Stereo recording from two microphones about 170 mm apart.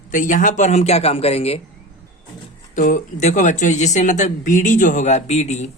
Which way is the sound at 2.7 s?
50° left (ahead or behind).